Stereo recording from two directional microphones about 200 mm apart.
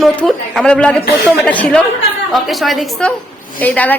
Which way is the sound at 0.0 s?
Centre (ahead or behind).